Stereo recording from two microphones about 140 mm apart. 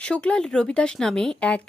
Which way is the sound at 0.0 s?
5° left (ahead or behind).